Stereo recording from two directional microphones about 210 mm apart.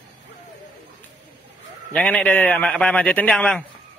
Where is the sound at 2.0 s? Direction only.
5° left (ahead or behind).